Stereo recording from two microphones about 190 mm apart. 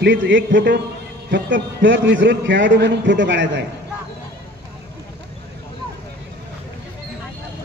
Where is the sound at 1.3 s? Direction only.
75° right (ahead or behind).